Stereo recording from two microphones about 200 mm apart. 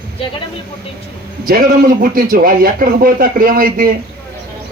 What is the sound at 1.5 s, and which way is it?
A man's voice, 45° right (ahead or behind).